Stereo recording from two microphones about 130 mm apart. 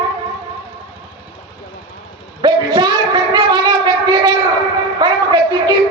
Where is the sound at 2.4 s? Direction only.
35° right (ahead or behind).